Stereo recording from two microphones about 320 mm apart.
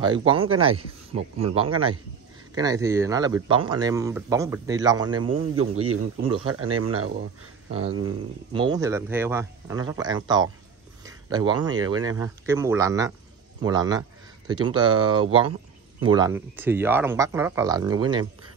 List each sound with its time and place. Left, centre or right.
0.0 s speech: centre
0.5 s speech: right
1.5 s speech: centre
5.3 s a man's voice: right
8.5 s speech: centre